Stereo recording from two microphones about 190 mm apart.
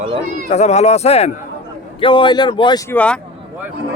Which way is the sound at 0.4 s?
35° left (ahead or behind).